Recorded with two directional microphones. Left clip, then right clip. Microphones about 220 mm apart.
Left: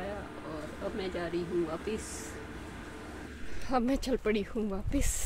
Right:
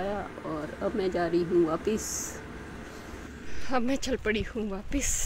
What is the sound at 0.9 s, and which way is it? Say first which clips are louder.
Speech: right 8 dB; 25° right (ahead or behind).